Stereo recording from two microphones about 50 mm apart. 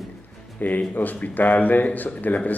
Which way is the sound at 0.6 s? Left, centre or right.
Left.